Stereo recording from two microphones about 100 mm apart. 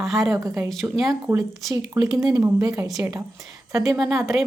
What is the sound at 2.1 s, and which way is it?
Speech, 35° right (ahead or behind).